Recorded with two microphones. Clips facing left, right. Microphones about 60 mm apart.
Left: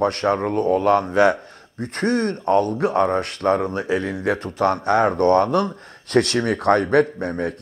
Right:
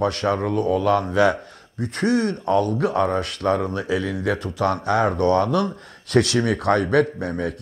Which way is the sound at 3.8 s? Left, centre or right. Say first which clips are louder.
Left 1 dB; left.